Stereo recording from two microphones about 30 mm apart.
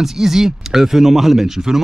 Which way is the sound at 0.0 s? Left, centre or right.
Centre.